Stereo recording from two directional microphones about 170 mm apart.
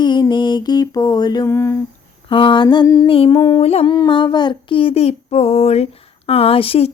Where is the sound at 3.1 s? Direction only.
35° left (ahead or behind).